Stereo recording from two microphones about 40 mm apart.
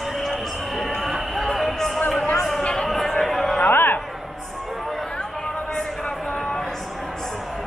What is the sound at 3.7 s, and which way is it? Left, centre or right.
Music, left.